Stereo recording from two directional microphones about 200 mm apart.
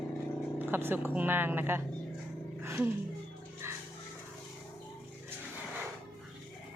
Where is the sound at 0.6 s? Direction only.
10° right (ahead or behind).